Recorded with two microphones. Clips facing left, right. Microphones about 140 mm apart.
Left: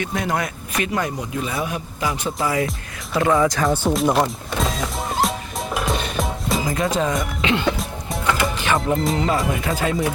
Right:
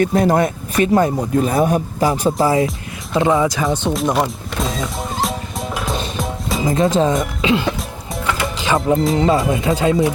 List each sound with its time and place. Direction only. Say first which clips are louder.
0.0 s speech: right 9 dB; 35° right (ahead or behind)
3.2 s speech: right 2 dB; 20° right (ahead or behind)
3.5 s music: right 1 dB; centre (ahead or behind)
6.7 s speech: right 8 dB; 25° right (ahead or behind)
7.5 s music: right 1 dB; centre (ahead or behind)
8.6 s speech: right 6 dB; 20° right (ahead or behind)